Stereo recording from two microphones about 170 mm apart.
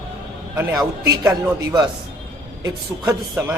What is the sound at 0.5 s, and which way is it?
A man's voice, 15° right (ahead or behind).